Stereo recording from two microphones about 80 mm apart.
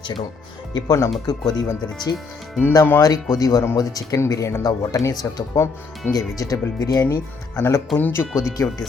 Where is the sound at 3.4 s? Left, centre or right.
Left.